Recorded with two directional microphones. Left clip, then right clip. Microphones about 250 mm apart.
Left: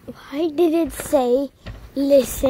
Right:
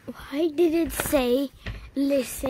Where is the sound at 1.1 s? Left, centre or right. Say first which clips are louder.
Left 6 dB; centre.